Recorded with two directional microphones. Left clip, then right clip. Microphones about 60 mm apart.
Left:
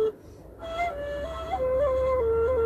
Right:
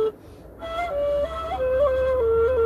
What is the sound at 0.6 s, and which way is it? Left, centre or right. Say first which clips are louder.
Flute: right 4 dB; right.